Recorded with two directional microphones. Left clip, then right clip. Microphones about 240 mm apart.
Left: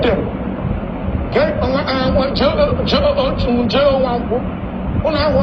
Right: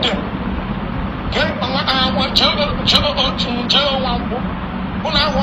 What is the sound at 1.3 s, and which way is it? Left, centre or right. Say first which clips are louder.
Speech: left 3 dB; left.